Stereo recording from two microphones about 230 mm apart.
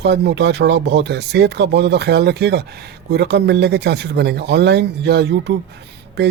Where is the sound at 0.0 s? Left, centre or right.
Right.